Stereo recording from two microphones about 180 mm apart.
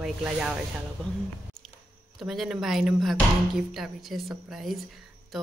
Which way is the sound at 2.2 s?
Centre (ahead or behind).